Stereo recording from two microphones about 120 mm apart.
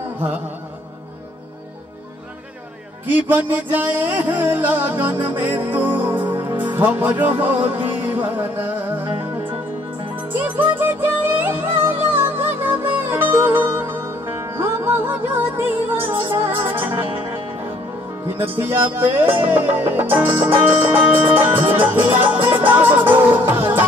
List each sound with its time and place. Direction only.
3.1 s speech: 15° right (ahead or behind)
10.2 s music: 15° right (ahead or behind)
18.4 s speech: 20° right (ahead or behind)
21.9 s music: 15° right (ahead or behind)